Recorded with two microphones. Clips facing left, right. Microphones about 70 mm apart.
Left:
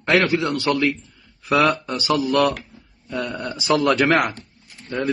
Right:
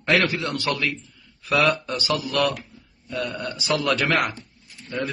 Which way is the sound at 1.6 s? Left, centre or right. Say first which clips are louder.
Left 2 dB; centre.